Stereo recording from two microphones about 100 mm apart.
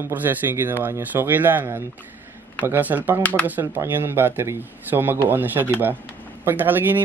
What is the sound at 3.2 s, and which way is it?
Speech, 15° left (ahead or behind).